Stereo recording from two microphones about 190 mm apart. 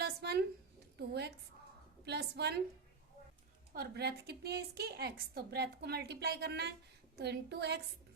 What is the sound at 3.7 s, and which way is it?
A woman's voice, 55° right (ahead or behind).